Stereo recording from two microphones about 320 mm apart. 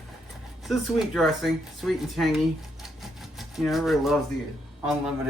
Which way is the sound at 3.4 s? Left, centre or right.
Centre.